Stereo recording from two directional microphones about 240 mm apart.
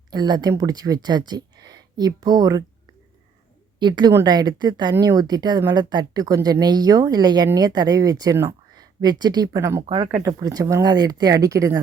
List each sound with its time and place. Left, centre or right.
0.1 s speech: centre
3.8 s speech: centre
10.1 s speech: centre
10.4 s speech: centre